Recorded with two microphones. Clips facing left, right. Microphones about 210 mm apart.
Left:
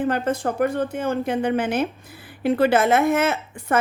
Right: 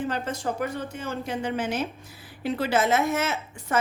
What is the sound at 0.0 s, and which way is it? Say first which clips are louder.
A woman's voice: left 7 dB; 55° left (ahead or behind).